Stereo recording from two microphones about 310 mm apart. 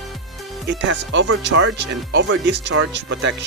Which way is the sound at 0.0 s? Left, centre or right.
Centre.